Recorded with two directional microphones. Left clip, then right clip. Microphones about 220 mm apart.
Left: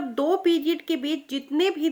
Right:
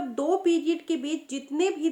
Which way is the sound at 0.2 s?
40° left (ahead or behind).